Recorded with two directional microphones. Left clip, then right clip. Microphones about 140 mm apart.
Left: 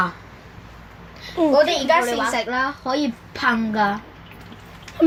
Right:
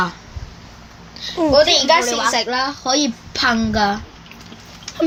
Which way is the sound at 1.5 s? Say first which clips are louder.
Right 4 dB; 50° right (ahead or behind).